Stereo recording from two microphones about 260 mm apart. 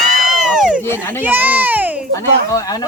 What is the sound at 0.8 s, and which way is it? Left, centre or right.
Speech, centre.